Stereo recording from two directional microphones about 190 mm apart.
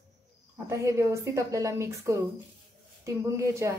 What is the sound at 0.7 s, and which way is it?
A woman's voice, 15° right (ahead or behind).